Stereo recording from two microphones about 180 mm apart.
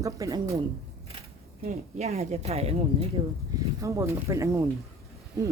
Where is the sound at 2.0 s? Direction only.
35° right (ahead or behind); by 4.6 s 15° right (ahead or behind).